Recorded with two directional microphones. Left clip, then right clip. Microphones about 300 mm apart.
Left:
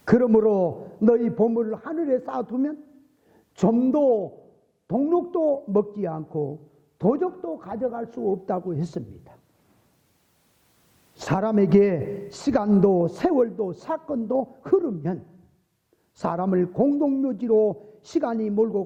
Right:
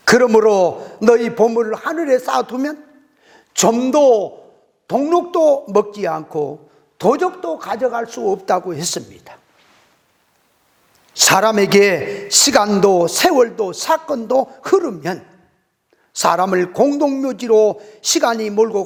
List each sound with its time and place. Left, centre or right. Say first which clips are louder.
0.0 s a man's voice: right 8 dB; centre
3.2 s a sound: right 9 dB; centre
4.2 s speech: right 9 dB; right
4.9 s a man's voice: right 7 dB; centre
5.4 s a man's voice: right 10 dB; right
5.7 s a man's voice: right 8 dB; centre
11.1 s a man's voice: right 12 dB; centre
14.3 s a man's voice: right 8 dB; centre